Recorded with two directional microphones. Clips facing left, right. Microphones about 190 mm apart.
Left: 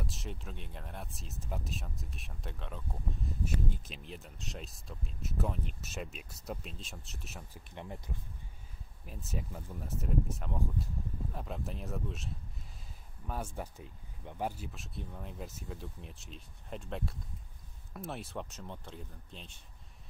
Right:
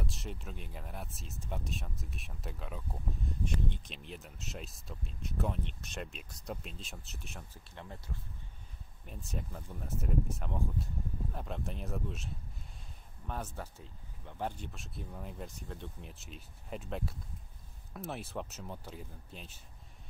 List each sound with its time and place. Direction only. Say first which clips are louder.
0.0 s speech: even; centre (ahead or behind)
7.5 s speech: left 3 dB; 15° left (ahead or behind)
9.0 s speech: left 1 dB; 5° left (ahead or behind)
13.3 s speech: left 2 dB; 10° left (ahead or behind); by 19.6 s 5° right (ahead or behind)